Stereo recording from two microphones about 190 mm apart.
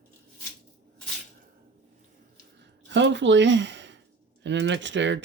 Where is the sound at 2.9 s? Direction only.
70° right (ahead or behind).